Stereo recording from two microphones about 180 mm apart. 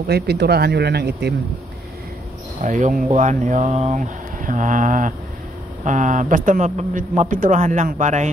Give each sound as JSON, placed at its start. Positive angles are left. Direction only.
{"t": 0.0, "sound": "speech", "side_deg": -65}
{"t": 2.6, "sound": "a man's voice", "side_deg": -45}